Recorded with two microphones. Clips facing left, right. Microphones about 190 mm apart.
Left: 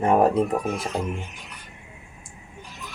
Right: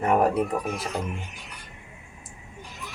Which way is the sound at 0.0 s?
25° left (ahead or behind).